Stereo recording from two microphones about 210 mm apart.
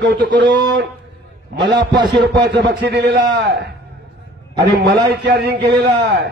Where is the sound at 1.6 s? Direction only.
55° right (ahead or behind).